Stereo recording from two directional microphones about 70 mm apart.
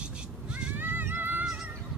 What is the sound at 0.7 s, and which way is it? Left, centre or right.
Music, right.